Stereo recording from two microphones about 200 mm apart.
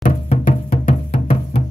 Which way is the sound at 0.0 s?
40° left (ahead or behind).